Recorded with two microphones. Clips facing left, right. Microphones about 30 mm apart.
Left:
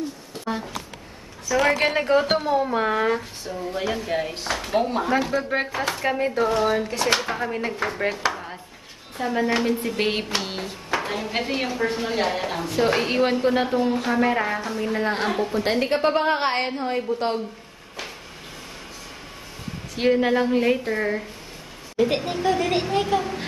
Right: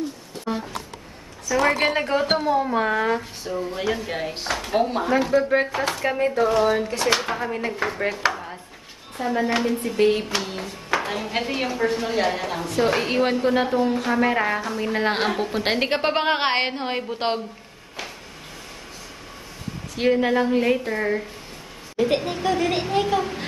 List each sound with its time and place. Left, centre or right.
1.6 s a woman's voice: left
2.0 s a woman's voice: centre
5.7 s speech: centre
5.9 s a woman's voice: centre
9.8 s a sound: left
10.9 s a woman's voice: centre
15.0 s a woman's voice: right
20.0 s a woman's voice: centre